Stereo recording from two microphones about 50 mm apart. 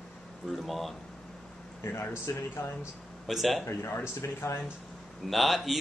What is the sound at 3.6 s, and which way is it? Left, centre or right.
Speech, left.